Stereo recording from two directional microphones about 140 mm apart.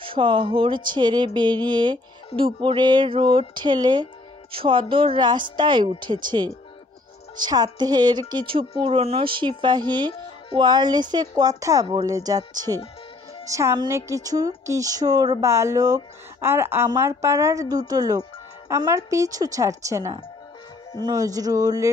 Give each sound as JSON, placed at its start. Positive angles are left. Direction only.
{"t": 0.0, "sound": "music", "side_deg": -40}
{"t": 10.6, "sound": "a woman's voice", "side_deg": -30}